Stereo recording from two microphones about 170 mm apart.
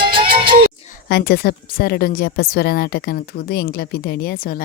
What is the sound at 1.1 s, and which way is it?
A woman's voice, 75° left (ahead or behind).